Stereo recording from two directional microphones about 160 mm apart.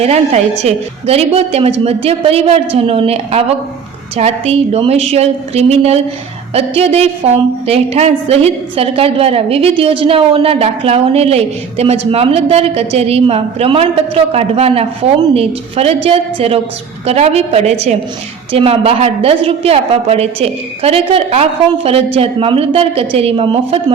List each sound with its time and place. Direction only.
0.0 s a woman's voice: 40° right (ahead or behind)